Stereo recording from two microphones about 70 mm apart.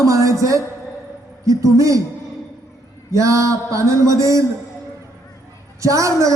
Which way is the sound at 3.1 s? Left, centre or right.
Right.